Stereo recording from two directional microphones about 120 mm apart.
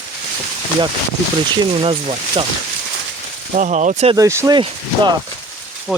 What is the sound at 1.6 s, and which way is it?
Speech, 45° right (ahead or behind).